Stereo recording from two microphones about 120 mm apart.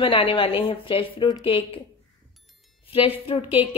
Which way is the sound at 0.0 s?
50° left (ahead or behind).